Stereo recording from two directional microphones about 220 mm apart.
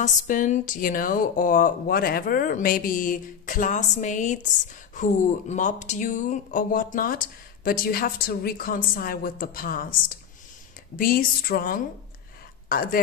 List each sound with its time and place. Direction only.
0.0 s speech: 35° left (ahead or behind)
5.5 s speech: 35° left (ahead or behind)